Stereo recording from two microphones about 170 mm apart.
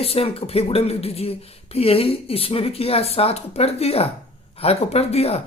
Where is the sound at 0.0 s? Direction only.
35° left (ahead or behind).